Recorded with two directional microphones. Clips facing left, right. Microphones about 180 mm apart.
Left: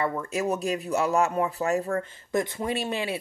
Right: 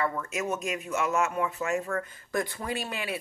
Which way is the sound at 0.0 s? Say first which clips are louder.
Left 3 dB; 25° left (ahead or behind).